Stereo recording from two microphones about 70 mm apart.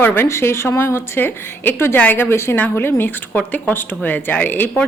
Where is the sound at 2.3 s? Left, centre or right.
Left.